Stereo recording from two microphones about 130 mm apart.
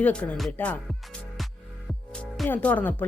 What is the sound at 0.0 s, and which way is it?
Speech, 10° left (ahead or behind).